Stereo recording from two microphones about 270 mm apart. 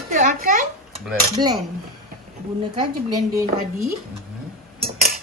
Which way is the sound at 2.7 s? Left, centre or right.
Centre.